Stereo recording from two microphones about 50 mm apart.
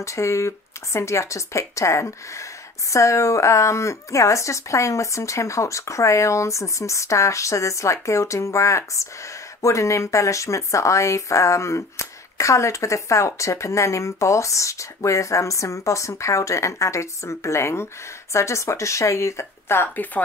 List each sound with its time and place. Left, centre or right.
0.0 s speech: left